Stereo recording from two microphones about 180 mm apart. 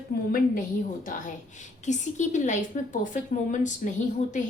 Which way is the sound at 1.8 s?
40° left (ahead or behind).